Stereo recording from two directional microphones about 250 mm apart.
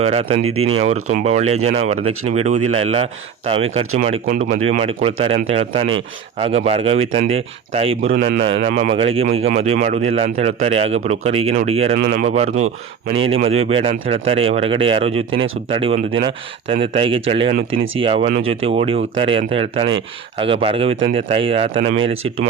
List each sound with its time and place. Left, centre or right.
0.0 s speech: right
0.4 s speech: right
0.8 s speech: right
8.1 s speech: right